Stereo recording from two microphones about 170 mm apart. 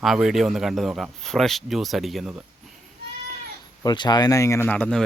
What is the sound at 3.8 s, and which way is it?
Speech, 25° left (ahead or behind).